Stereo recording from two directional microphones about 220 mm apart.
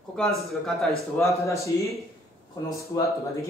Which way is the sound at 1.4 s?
15° left (ahead or behind).